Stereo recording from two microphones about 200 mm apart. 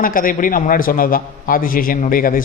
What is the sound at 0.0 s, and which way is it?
A man's voice, 45° left (ahead or behind).